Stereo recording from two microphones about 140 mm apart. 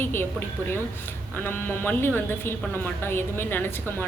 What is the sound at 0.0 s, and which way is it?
A woman's voice, 15° left (ahead or behind).